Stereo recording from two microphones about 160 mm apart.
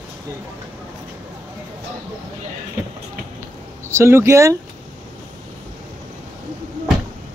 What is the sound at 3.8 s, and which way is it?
Speech, 15° right (ahead or behind).